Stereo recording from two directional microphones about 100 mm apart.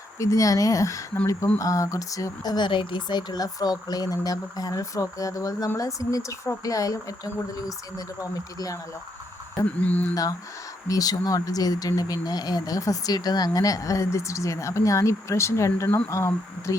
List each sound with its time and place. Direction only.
0.2 s speech: 35° left (ahead or behind)
9.6 s speech: 15° left (ahead or behind)
10.8 s speech: 35° left (ahead or behind)